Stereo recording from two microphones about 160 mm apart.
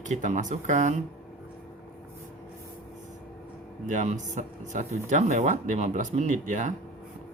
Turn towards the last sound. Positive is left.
turn(degrees=-50)  # may be behind; listen again after turning